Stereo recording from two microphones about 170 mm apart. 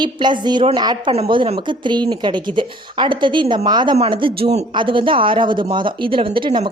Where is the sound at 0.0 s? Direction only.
25° right (ahead or behind).